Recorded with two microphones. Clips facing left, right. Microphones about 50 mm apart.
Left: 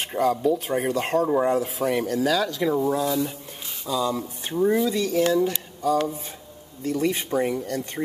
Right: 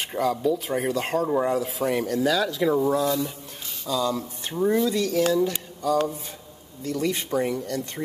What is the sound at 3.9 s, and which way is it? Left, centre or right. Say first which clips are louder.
Speech: even; centre.